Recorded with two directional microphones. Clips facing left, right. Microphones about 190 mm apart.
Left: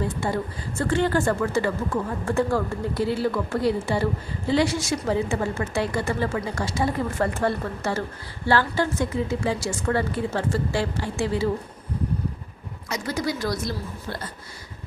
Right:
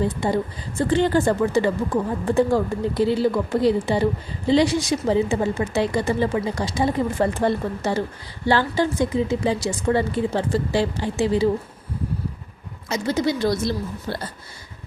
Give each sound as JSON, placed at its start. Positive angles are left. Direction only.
{"t": 0.8, "sound": "speech", "side_deg": -20}
{"t": 12.9, "sound": "speech", "side_deg": -25}